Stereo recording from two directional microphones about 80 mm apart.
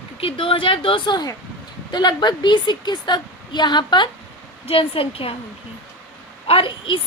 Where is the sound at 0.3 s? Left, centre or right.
Left.